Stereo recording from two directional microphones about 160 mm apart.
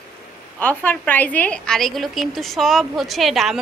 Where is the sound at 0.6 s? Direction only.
10° left (ahead or behind).